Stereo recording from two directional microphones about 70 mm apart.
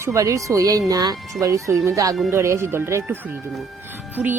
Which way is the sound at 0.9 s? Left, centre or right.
Right.